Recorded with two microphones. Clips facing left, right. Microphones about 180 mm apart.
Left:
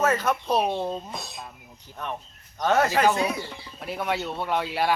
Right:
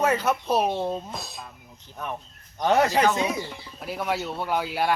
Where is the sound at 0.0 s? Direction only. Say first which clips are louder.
Even; 10° right (ahead or behind).